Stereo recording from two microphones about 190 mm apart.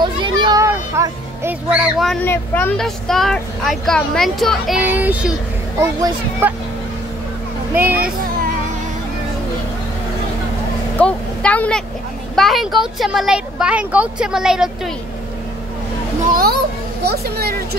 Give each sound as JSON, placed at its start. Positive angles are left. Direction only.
{"t": 0.0, "sound": "music", "side_deg": -25}
{"t": 2.2, "sound": "a child's voice", "side_deg": 10}
{"t": 11.0, "sound": "speech", "side_deg": 5}
{"t": 16.3, "sound": "a sound", "side_deg": -50}
{"t": 17.0, "sound": "speech", "side_deg": -55}